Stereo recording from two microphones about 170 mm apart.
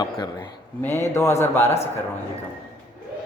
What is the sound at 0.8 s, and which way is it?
Speech, 15° left (ahead or behind).